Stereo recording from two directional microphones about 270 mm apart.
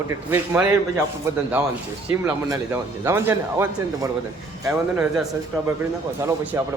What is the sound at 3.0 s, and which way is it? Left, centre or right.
A man's voice, centre.